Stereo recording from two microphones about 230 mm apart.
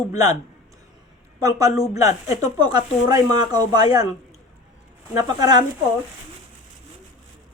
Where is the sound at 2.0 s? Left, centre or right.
Centre.